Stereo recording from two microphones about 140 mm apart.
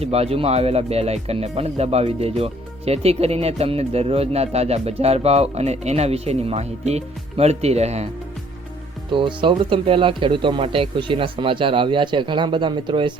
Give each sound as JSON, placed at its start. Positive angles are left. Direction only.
{"t": 0.0, "sound": "speech", "side_deg": -45}
{"t": 9.0, "sound": "speech", "side_deg": -35}